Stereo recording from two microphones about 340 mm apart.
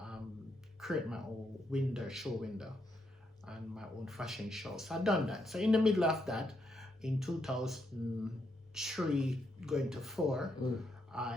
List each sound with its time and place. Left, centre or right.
0.8 s speech: centre